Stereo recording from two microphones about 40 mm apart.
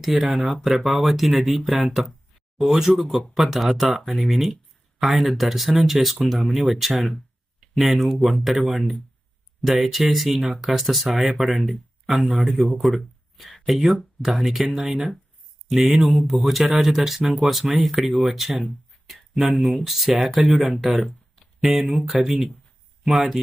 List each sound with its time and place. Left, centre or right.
0.0 s speech: centre
14.8 s speech: right
15.7 s speech: centre
16.3 s speech: centre
16.7 s speech: centre
18.0 s speech: centre
18.3 s speech: centre
20.8 s speech: centre
21.6 s speech: centre